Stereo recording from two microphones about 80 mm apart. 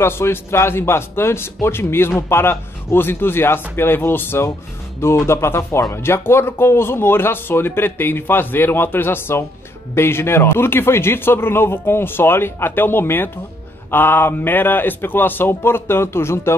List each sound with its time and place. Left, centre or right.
0.0 s a man's voice: left